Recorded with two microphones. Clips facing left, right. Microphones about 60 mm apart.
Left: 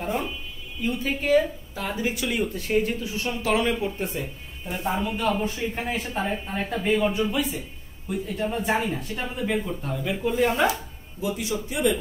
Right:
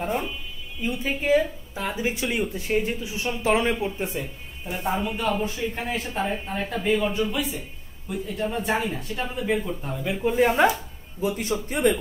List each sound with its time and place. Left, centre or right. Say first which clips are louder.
0.8 s speech: even; centre
3.4 s speech: right 1 dB; right
4.2 s speech: even; centre
9.8 s speech: right 3 dB; centre
10.4 s a man's voice: right 3 dB; right